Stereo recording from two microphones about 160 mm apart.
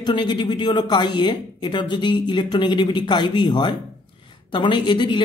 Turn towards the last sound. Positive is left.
turn(degrees=30)  # may be behind; listen again after turning